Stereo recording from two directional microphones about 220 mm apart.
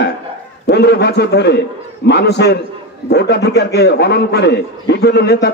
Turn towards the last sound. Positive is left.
turn(degrees=50)  # may be behind; listen again after turning